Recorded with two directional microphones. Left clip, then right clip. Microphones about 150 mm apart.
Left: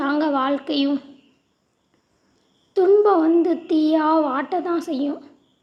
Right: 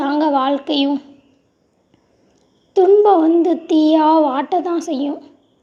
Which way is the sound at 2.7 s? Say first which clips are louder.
Right 5 dB; 15° right (ahead or behind).